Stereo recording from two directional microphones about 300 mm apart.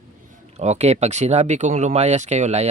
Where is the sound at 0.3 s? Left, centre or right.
Right.